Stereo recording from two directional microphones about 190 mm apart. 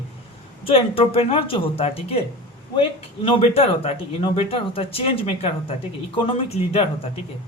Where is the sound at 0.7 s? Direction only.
30° left (ahead or behind).